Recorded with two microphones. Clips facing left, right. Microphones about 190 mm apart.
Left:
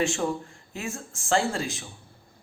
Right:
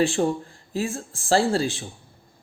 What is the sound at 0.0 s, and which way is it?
A man's voice, 35° right (ahead or behind).